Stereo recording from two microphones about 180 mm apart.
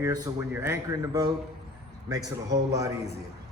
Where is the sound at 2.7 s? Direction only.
20° right (ahead or behind).